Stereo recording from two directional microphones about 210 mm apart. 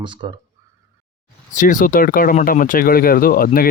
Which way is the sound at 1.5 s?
40° left (ahead or behind).